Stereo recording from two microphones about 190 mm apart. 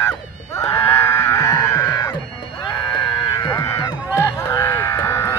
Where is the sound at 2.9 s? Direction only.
20° left (ahead or behind).